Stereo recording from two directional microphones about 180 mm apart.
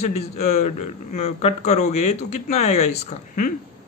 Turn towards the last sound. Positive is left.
turn(degrees=40)  # may be behind; listen again after turning